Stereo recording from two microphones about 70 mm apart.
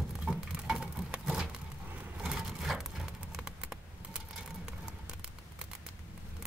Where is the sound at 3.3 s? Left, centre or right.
Centre.